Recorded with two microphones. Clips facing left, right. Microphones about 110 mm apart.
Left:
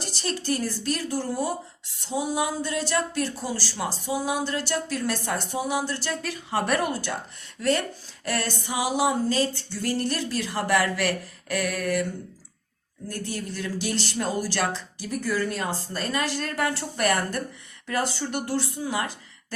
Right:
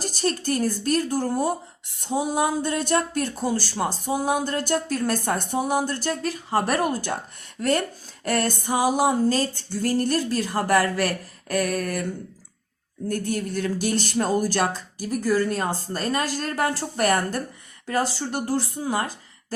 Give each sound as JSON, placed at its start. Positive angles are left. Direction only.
{"t": 0.0, "sound": "speech", "side_deg": -45}
{"t": 13.1, "sound": "a woman's voice", "side_deg": -50}